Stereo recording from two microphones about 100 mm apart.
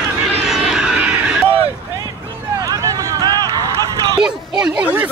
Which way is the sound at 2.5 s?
35° right (ahead or behind).